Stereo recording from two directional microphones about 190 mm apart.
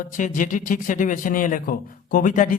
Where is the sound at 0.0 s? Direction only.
45° left (ahead or behind).